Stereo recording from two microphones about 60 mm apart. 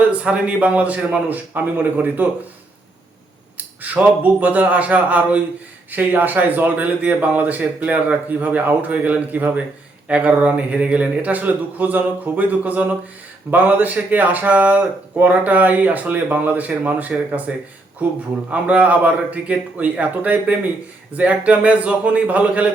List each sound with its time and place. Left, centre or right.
0.1 s speech: right
3.8 s speech: right
18.5 s speech: right